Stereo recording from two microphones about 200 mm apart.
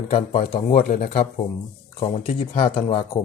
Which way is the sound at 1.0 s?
50° left (ahead or behind).